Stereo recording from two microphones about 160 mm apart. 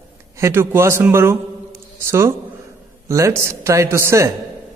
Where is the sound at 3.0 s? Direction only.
20° right (ahead or behind).